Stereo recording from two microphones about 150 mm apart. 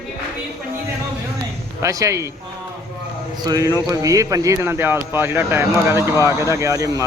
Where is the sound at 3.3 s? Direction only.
25° right (ahead or behind).